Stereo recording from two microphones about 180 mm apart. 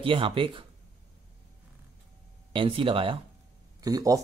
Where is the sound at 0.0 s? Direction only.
30° right (ahead or behind).